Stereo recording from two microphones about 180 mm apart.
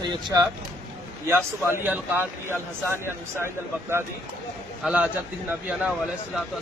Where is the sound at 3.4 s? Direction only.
15° right (ahead or behind).